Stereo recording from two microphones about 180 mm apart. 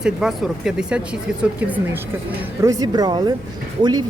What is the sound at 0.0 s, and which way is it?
Speech, 5° right (ahead or behind).